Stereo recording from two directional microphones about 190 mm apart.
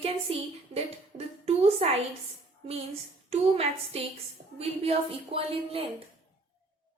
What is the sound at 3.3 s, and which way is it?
A woman's voice, 30° right (ahead or behind).